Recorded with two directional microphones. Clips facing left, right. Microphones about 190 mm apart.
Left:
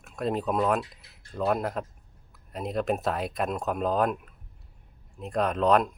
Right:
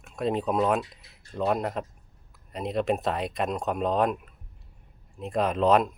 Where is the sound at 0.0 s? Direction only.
Centre (ahead or behind).